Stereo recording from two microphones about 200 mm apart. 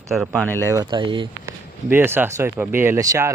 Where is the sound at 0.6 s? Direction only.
15° right (ahead or behind).